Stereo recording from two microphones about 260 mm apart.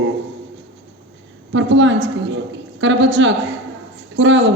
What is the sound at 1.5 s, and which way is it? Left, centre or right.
A man's voice, right.